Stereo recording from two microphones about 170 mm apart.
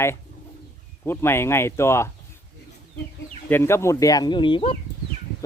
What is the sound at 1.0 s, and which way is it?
Speech, 15° left (ahead or behind).